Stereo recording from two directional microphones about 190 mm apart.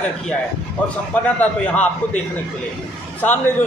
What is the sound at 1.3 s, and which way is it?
Speech, 5° left (ahead or behind).